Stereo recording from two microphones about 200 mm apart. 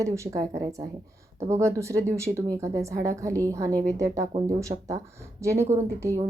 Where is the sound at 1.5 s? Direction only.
15° right (ahead or behind).